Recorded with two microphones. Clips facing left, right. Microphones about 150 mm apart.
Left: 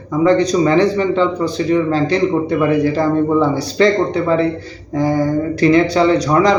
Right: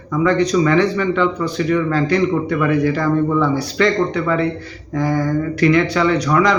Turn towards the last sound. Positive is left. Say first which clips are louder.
# left 3 dB
turn(degrees=35)  # may be behind; listen again after turning